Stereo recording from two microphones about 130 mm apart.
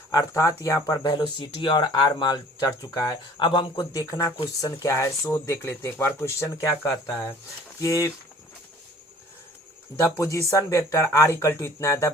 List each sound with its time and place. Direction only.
0.1 s speech: 25° left (ahead or behind)
10.0 s speech: 25° left (ahead or behind)